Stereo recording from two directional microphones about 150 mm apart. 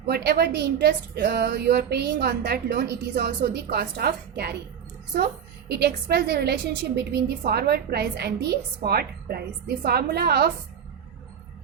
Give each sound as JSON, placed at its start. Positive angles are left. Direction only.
{"t": 0.1, "sound": "a woman's voice", "side_deg": -90}